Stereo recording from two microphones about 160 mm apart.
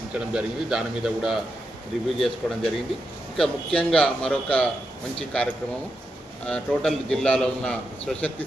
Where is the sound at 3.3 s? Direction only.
5° left (ahead or behind).